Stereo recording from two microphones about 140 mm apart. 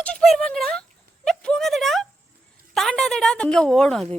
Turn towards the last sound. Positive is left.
turn(degrees=5)  # may be behind; listen again after turning